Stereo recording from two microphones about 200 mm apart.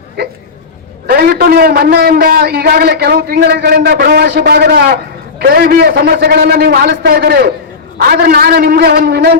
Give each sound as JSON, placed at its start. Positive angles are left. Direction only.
{"t": 1.0, "sound": "a man's voice", "side_deg": -50}